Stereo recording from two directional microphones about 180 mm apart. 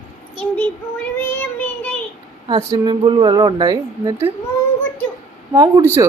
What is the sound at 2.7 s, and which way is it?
Speech, 25° right (ahead or behind).